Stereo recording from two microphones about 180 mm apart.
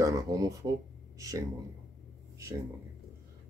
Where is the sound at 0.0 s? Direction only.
20° right (ahead or behind).